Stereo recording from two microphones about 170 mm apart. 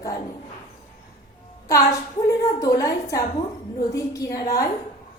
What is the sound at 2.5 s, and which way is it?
A woman's voice, 20° left (ahead or behind).